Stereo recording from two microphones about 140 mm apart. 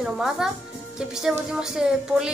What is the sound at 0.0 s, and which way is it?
A child's voice, 5° right (ahead or behind).